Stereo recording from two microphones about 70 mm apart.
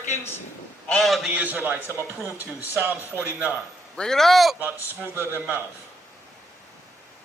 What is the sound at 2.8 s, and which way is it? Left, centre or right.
Speech, right.